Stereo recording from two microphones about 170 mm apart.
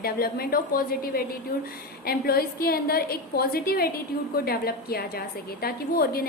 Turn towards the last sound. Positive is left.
turn(degrees=65)  # may be behind; listen again after turning